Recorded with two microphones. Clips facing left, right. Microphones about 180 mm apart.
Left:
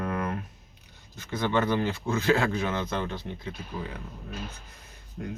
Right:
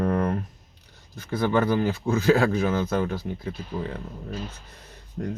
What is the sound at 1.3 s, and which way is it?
Speech, 10° right (ahead or behind).